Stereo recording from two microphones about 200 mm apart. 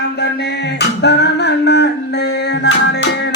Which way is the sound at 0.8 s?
60° left (ahead or behind).